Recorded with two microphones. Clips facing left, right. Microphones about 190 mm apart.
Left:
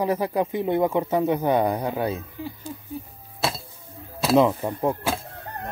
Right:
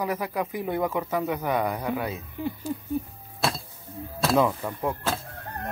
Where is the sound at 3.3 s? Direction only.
Centre (ahead or behind).